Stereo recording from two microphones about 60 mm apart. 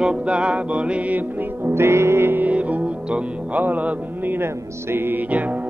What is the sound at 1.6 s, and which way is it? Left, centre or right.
Music, right.